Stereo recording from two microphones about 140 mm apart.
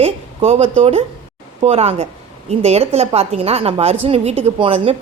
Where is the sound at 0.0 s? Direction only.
45° right (ahead or behind).